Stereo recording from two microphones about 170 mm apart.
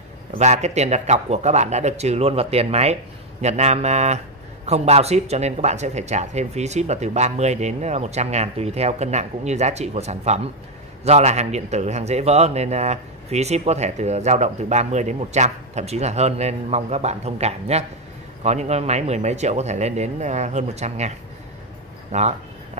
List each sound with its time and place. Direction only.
0.3 s a man's voice: 40° right (ahead or behind)